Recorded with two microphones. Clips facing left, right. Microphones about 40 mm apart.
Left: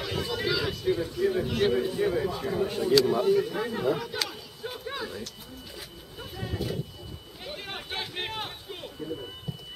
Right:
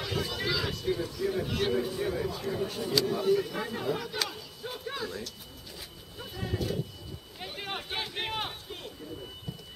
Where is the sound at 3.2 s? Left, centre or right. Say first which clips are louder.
Left 3 dB; centre.